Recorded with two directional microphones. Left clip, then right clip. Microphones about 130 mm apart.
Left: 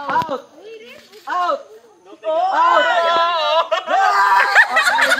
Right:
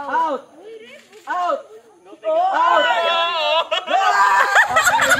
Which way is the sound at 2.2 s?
10° left (ahead or behind).